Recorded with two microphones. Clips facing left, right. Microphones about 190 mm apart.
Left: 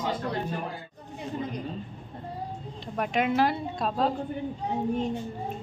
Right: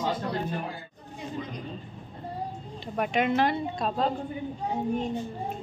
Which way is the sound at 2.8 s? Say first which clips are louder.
Right 1 dB; centre (ahead or behind).